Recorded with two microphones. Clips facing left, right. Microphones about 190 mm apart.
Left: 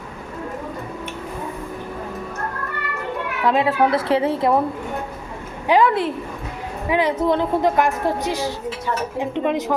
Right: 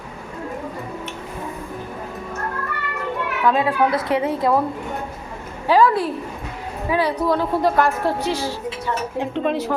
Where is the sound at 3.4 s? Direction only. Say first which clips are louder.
Left 1 dB; 25° left (ahead or behind).